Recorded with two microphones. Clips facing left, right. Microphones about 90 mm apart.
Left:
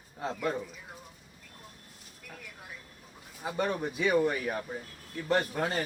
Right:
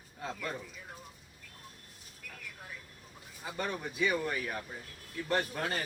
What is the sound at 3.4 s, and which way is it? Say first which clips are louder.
Speech: left 6 dB; 20° left (ahead or behind).